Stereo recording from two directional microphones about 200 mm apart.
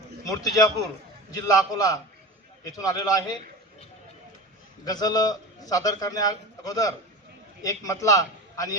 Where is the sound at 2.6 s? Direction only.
15° left (ahead or behind).